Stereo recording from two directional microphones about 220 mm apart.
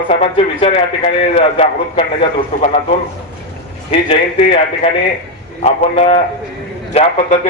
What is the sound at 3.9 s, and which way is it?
A man's voice, 25° left (ahead or behind).